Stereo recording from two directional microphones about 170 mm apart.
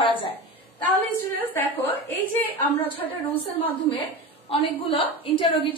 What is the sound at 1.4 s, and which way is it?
Speech, 10° left (ahead or behind).